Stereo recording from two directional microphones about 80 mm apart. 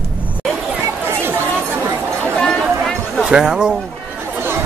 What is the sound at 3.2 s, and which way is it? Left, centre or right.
Speech, centre.